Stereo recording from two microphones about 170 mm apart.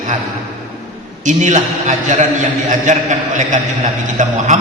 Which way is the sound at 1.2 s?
45° right (ahead or behind).